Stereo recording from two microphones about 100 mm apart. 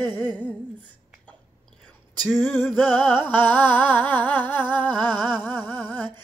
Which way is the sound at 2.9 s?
20° left (ahead or behind).